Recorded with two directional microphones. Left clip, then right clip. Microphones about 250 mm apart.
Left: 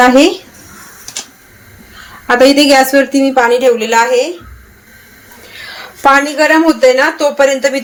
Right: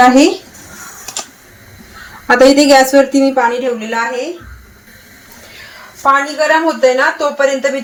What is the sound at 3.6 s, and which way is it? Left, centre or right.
Speech, left.